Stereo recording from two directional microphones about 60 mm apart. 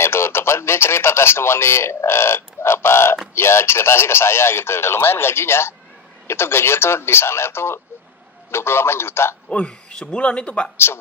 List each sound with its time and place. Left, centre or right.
0.0 s speech: left
9.5 s speech: centre